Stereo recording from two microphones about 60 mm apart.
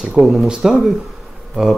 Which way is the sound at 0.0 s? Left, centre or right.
Centre.